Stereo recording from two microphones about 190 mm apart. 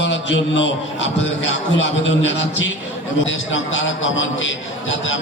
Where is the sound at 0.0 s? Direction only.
70° left (ahead or behind).